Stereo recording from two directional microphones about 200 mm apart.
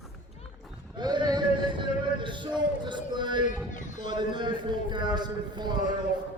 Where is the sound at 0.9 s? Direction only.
20° right (ahead or behind).